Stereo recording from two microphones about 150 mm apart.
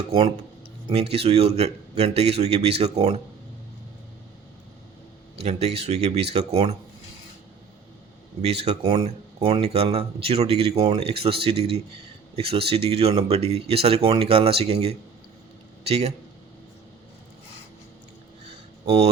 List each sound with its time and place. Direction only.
0.1 s speech: 45° right (ahead or behind)
5.4 s speech: 45° right (ahead or behind)
8.4 s speech: 45° right (ahead or behind)
18.9 s speech: 40° right (ahead or behind)